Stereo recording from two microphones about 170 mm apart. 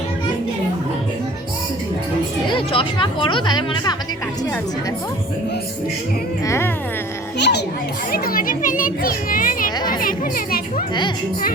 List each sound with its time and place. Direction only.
2.5 s speech: 30° left (ahead or behind)
6.4 s speech: 15° left (ahead or behind)
7.3 s a child's voice: 90° left
8.1 s speech: 60° left (ahead or behind)